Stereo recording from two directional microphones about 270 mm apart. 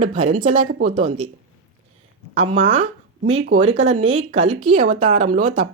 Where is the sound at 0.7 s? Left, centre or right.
Right.